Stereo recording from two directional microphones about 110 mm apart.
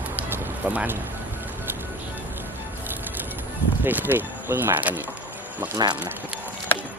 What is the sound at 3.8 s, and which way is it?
Speech, 15° right (ahead or behind).